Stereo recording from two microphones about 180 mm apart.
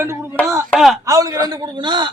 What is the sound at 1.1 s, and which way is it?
A man's voice, 20° right (ahead or behind).